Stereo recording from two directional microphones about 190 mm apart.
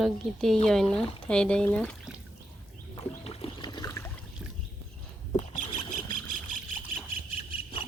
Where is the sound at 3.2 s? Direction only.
30° left (ahead or behind).